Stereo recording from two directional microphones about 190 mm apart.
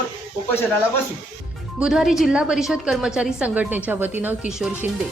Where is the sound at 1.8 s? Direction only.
5° right (ahead or behind).